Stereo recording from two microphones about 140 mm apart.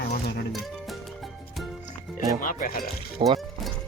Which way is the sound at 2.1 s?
75° left (ahead or behind).